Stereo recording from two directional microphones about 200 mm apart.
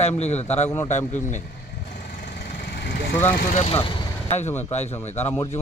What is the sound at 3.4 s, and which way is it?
Speech, 40° left (ahead or behind).